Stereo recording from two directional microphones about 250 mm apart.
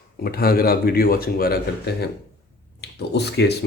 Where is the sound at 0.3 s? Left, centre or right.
Left.